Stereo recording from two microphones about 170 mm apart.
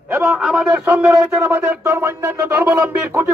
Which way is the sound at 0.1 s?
10° right (ahead or behind).